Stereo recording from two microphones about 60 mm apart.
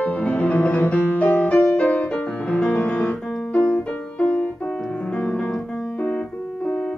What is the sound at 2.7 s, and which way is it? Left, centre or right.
Music, left.